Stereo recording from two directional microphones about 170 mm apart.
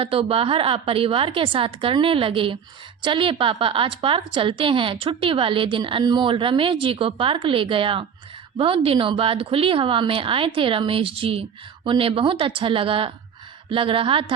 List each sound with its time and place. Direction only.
0.0 s a woman's voice: 35° right (ahead or behind)